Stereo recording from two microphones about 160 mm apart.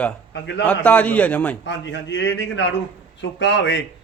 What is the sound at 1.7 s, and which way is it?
Speech, 90° left.